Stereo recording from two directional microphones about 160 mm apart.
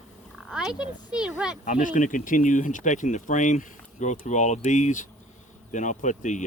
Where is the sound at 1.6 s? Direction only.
55° left (ahead or behind).